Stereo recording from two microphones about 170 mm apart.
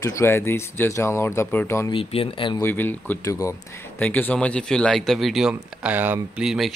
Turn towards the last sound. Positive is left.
turn(degrees=0)  # may be behind; listen again after turning